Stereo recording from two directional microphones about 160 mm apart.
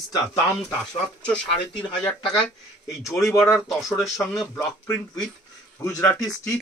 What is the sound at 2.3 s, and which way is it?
Speech, centre (ahead or behind).